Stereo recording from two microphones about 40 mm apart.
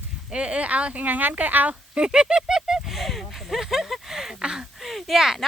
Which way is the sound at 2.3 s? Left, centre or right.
Centre.